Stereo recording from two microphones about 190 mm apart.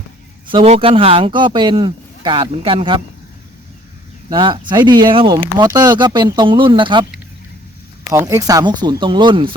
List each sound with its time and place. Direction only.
0.5 s speech: 30° right (ahead or behind)
4.3 s speech: 25° right (ahead or behind)
8.1 s speech: 15° right (ahead or behind)